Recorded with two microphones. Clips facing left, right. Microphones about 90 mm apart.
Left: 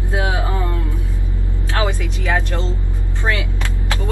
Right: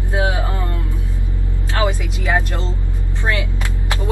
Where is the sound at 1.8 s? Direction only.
15° right (ahead or behind).